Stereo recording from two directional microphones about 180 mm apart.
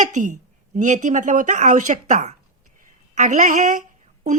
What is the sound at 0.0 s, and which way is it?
A woman's voice, 45° right (ahead or behind).